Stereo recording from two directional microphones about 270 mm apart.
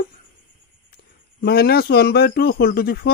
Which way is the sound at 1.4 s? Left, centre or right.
Left.